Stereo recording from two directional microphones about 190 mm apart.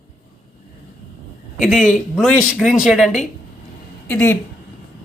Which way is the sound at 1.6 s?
5° right (ahead or behind).